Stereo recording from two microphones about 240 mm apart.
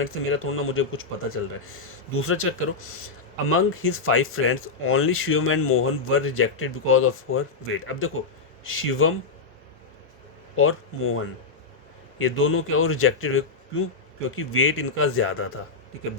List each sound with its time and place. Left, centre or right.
0.0 s speech: left
10.5 s speech: left
12.2 s speech: left